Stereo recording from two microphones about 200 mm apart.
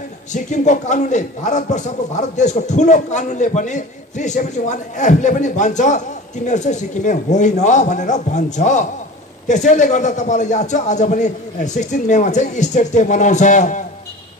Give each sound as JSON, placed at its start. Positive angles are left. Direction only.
{"t": 0.3, "sound": "a man's voice", "side_deg": 35}